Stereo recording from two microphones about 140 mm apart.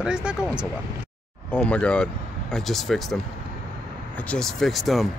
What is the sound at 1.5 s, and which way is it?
Speech, 5° left (ahead or behind).